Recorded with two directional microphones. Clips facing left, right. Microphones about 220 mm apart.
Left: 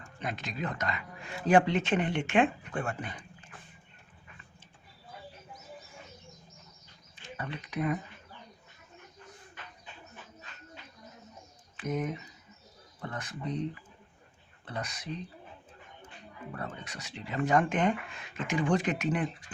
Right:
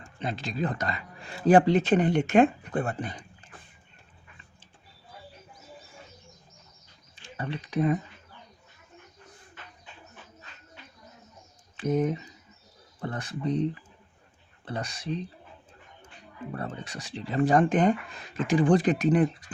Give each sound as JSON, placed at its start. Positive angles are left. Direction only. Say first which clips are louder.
{"t": 0.2, "sound": "speech", "louder": "right 5 dB", "side_deg": -30}
{"t": 7.3, "sound": "speech", "louder": "right 6 dB", "side_deg": -30}
{"t": 11.8, "sound": "speech", "louder": "right 7 dB", "side_deg": -30}
{"t": 14.6, "sound": "speech", "louder": "right 4 dB", "side_deg": -30}
{"t": 16.5, "sound": "speech", "louder": "right 5 dB", "side_deg": -30}